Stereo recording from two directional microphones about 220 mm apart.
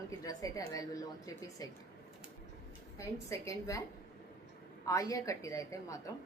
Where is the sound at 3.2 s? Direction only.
15° left (ahead or behind).